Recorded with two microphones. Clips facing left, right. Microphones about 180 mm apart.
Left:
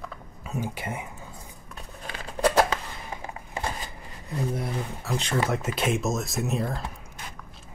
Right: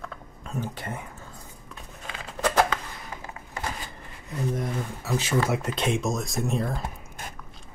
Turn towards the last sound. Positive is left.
turn(degrees=-50)  # may be behind; listen again after turning